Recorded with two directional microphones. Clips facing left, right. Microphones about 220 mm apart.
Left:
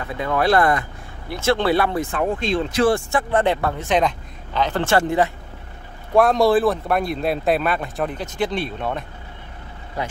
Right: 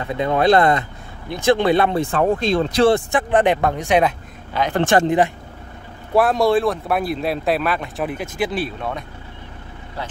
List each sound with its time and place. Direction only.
0.0 s speech: 20° right (ahead or behind)
2.1 s speech: 35° right (ahead or behind)
2.9 s speech: 20° right (ahead or behind)
6.1 s speech: centre (ahead or behind)